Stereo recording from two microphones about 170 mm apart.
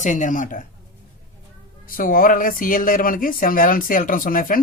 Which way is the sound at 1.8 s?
55° left (ahead or behind).